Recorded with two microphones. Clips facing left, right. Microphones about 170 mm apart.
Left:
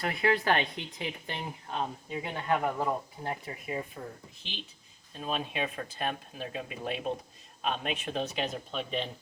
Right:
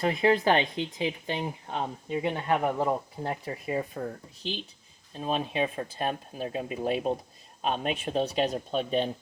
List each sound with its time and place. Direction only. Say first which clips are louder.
0.0 s speech: right 5 dB; 20° right (ahead or behind)
3.2 s speech: right 5 dB; 35° right (ahead or behind)
5.1 s speech: right 5 dB; 35° right (ahead or behind)